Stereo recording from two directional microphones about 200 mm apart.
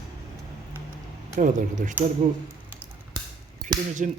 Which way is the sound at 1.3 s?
40° right (ahead or behind).